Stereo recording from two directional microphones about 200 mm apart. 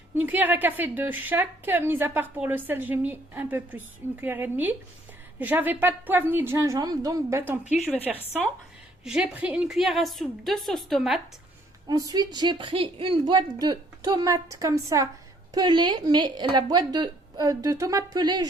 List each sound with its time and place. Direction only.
0.2 s a woman's voice: 10° right (ahead or behind)
11.9 s a woman's voice: 20° right (ahead or behind)